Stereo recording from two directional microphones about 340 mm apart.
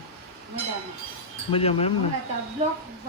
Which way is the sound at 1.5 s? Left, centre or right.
Centre.